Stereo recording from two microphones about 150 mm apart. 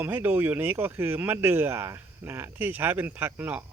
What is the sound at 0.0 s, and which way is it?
Speech, 10° right (ahead or behind).